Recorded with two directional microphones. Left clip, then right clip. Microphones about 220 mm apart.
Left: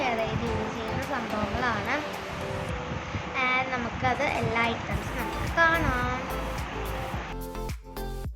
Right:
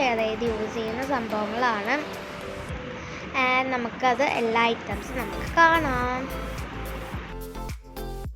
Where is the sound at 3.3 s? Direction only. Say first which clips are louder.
Right 3 dB; 25° right (ahead or behind).